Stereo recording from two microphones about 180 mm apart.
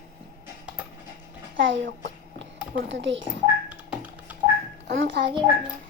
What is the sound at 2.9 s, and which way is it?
Speech, 90° right.